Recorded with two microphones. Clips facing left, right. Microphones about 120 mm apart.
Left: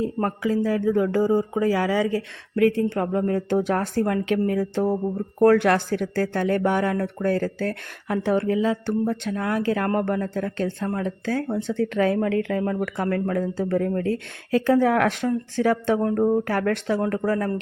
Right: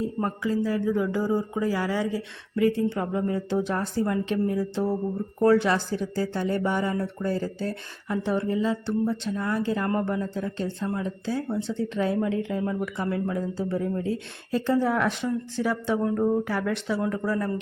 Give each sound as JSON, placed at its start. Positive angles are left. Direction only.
{"t": 0.0, "sound": "speech", "side_deg": 75}
{"t": 1.5, "sound": "speech", "side_deg": 80}
{"t": 2.9, "sound": "speech", "side_deg": 50}